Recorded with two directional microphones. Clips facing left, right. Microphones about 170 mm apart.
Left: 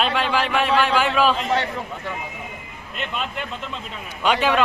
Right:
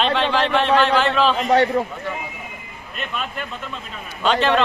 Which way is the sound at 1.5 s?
40° right (ahead or behind).